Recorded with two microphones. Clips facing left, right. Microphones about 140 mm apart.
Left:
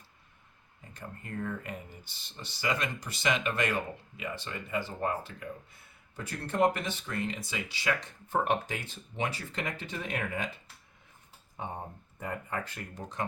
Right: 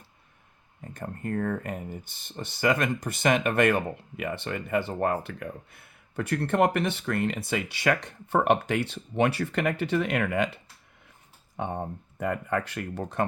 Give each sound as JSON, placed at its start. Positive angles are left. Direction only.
{"t": 0.9, "sound": "speech", "side_deg": -55}